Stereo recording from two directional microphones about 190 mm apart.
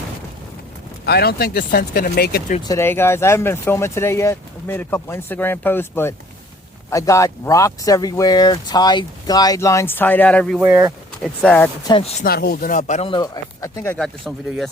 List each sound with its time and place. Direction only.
1.0 s speech: 60° left (ahead or behind)
2.6 s speech: 15° left (ahead or behind)
10.6 s speech: 15° right (ahead or behind)
11.2 s speech: 5° left (ahead or behind)
11.9 s speech: 25° left (ahead or behind)
12.2 s speech: 50° left (ahead or behind); by 14.7 s centre (ahead or behind)